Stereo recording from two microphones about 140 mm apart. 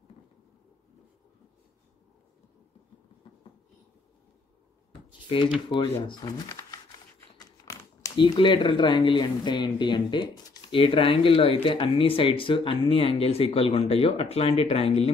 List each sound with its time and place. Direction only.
5.3 s speech: 40° left (ahead or behind)
7.3 s typing: 20° left (ahead or behind)
8.2 s speech: 35° left (ahead or behind)